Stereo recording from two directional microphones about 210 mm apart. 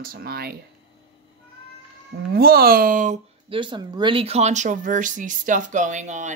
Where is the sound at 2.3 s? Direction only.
45° right (ahead or behind).